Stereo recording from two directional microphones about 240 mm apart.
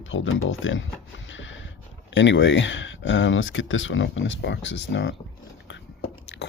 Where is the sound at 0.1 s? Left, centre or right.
Left.